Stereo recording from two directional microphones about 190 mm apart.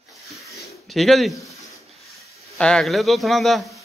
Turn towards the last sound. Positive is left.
turn(degrees=0)  # may be behind; listen again after turning